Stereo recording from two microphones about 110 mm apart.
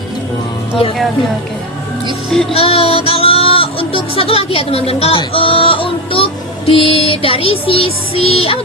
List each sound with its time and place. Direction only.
2.5 s speech: 65° left (ahead or behind)